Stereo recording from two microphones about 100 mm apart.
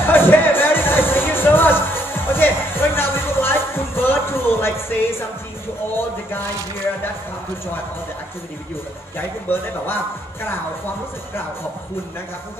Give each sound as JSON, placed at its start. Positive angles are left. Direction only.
{"t": 0.0, "sound": "music", "side_deg": 20}
{"t": 9.5, "sound": "speech", "side_deg": 20}